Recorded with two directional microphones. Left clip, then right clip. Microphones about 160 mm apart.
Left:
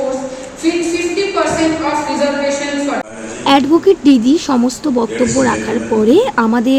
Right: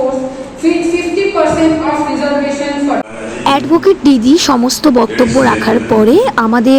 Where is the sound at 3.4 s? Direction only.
50° right (ahead or behind).